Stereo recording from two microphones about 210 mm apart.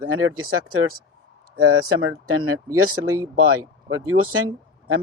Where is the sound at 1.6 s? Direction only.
90° right.